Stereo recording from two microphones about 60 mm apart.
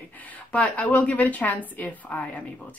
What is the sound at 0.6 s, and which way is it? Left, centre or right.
Speech, left.